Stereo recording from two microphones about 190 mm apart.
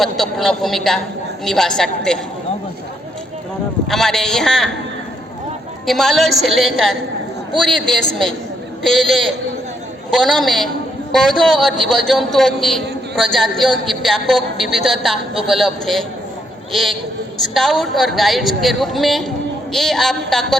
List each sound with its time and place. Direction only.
0.0 s a woman's voice: centre (ahead or behind)
3.8 s a woman's voice: centre (ahead or behind)
5.8 s a woman's voice: centre (ahead or behind)
8.8 s a woman's voice: centre (ahead or behind)
17.5 s a woman's voice: centre (ahead or behind)